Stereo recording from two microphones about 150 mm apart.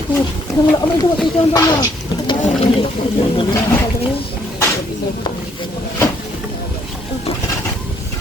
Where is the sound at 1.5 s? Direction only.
25° left (ahead or behind).